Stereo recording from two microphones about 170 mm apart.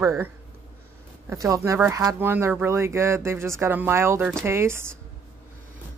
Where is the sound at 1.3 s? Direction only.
20° right (ahead or behind).